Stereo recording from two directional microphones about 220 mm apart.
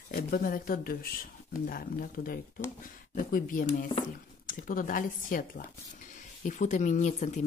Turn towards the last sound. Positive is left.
turn(degrees=30)  # may be behind; listen again after turning